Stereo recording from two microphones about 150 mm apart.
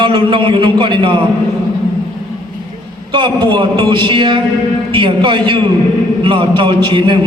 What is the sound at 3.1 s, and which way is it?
A man's voice, 30° right (ahead or behind).